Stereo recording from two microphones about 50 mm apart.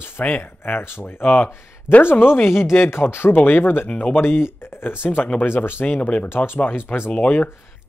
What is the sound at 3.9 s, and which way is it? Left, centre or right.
Speech, left.